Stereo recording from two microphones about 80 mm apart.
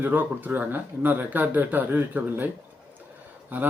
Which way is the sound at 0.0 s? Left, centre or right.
Right.